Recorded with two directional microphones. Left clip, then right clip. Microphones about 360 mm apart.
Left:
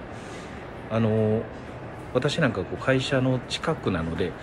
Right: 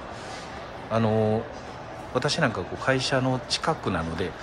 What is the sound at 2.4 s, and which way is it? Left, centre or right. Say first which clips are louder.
Speech: even; centre.